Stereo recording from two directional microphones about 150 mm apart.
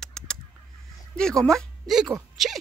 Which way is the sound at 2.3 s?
Centre (ahead or behind).